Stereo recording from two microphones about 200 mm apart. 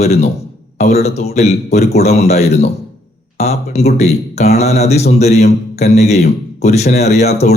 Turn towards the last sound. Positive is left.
turn(degrees=35)  # may be behind; listen again after turning